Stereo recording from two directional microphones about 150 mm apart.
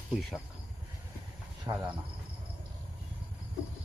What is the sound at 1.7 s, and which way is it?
Speech, 20° right (ahead or behind).